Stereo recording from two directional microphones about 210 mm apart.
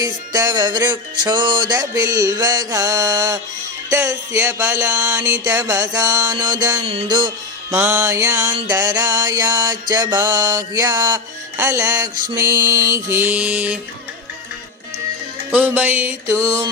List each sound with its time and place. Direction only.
0.0 s music: 15° right (ahead or behind)
7.7 s music: 10° right (ahead or behind)
15.5 s music: 10° right (ahead or behind)